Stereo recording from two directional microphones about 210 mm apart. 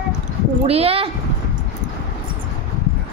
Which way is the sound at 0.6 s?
30° right (ahead or behind).